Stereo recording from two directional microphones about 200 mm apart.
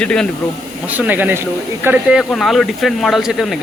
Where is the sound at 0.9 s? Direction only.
10° right (ahead or behind).